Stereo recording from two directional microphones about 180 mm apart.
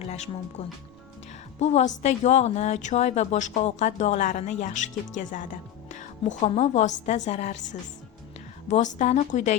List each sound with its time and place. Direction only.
0.0 s speech: 35° left (ahead or behind)
1.5 s a woman's voice: 40° left (ahead or behind)